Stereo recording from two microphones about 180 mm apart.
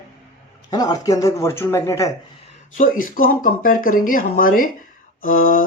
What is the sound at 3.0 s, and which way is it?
Speech, 50° left (ahead or behind).